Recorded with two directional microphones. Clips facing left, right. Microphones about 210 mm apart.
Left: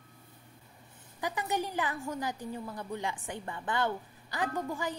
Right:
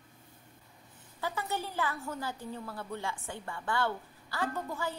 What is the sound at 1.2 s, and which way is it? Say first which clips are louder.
A woman's voice: left 2 dB; 15° left (ahead or behind).